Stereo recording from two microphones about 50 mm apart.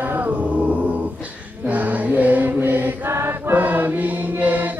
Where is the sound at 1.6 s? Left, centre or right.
Right.